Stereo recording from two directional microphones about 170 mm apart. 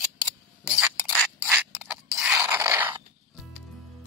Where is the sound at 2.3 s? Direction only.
20° right (ahead or behind).